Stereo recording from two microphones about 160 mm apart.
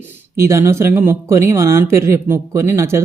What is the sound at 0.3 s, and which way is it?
A man's voice, 15° right (ahead or behind).